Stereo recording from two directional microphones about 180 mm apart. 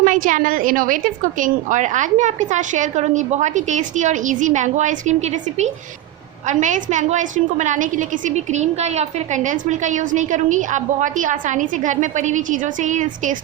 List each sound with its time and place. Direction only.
0.0 s a woman's voice: 45° right (ahead or behind)